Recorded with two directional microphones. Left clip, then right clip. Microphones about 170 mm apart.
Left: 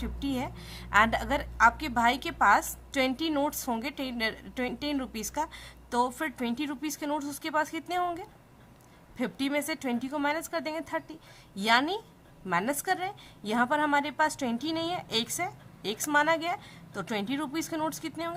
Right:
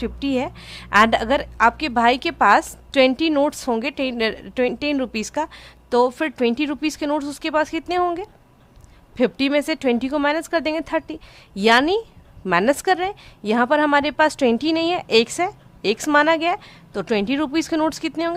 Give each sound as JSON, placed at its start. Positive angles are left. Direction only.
{"t": 0.0, "sound": "a woman's voice", "side_deg": -40}